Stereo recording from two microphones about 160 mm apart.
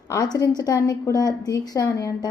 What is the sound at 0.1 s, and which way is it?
Speech, 20° left (ahead or behind).